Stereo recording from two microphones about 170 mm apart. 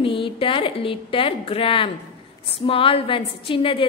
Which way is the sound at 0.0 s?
30° left (ahead or behind).